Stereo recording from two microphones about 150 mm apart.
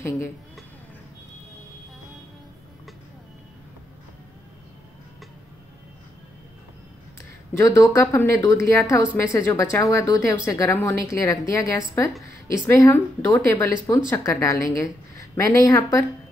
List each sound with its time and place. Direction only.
7.5 s speech: 20° left (ahead or behind)